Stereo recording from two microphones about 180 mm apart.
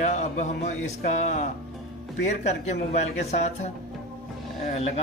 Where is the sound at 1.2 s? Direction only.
40° left (ahead or behind).